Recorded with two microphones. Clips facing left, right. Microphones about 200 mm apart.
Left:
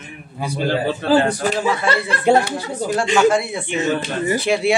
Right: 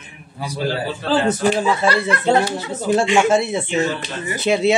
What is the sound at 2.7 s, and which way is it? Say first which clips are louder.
Speech: right 2 dB; 25° right (ahead or behind).